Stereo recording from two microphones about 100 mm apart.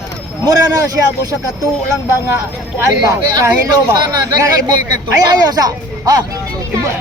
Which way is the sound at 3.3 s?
40° right (ahead or behind).